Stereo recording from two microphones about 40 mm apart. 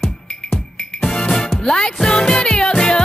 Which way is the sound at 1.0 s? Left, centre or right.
Centre.